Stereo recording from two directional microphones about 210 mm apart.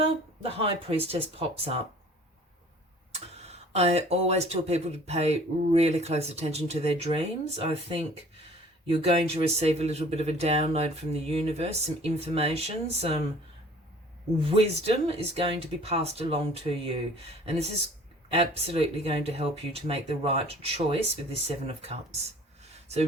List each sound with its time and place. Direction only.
0.0 s speech: 30° right (ahead or behind)
3.1 s speech: 30° right (ahead or behind)
14.3 s speech: 30° right (ahead or behind)